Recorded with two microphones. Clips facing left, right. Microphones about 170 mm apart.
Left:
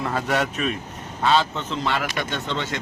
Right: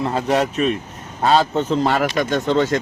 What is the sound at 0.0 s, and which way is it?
A man's voice, 35° right (ahead or behind).